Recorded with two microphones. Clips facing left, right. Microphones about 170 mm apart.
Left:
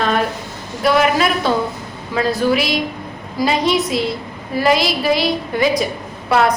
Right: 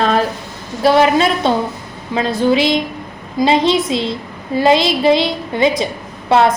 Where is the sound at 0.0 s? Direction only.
35° right (ahead or behind).